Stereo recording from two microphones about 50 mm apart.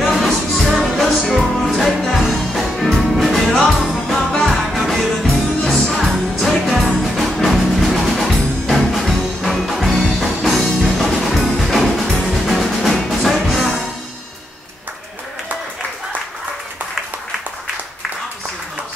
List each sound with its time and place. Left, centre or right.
0.0 s music: centre